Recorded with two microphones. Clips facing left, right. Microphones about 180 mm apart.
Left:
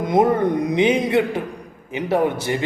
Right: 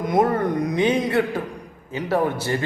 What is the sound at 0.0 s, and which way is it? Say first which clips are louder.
A man's voice: left 3 dB; 20° left (ahead or behind).